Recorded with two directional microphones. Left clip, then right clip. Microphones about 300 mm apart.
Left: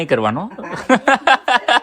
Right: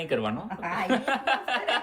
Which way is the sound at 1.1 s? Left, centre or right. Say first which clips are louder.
Left 13 dB; centre.